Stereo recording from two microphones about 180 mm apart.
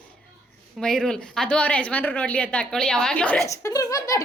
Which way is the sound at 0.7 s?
5° left (ahead or behind).